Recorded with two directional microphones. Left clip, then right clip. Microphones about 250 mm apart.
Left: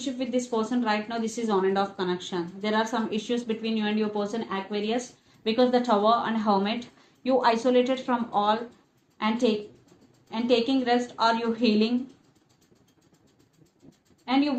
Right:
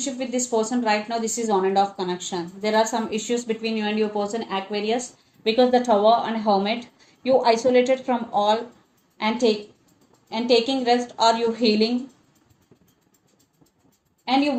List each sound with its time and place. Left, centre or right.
0.0 s a woman's voice: right